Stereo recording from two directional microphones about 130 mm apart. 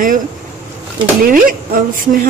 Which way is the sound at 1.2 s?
90° right.